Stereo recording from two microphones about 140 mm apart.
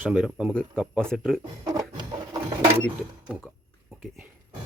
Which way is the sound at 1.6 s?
30° right (ahead or behind).